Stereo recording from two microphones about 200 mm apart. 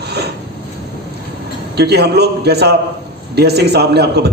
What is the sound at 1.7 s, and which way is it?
A man's voice, 55° right (ahead or behind).